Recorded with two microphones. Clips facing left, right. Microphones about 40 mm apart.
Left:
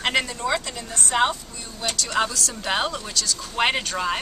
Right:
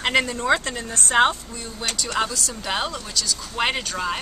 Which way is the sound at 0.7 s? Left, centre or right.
Right.